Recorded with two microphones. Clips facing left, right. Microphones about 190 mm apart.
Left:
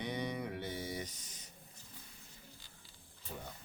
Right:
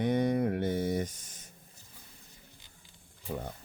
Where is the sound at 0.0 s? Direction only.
50° right (ahead or behind).